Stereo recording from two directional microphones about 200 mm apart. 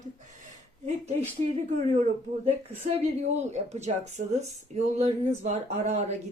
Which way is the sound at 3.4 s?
35° right (ahead or behind).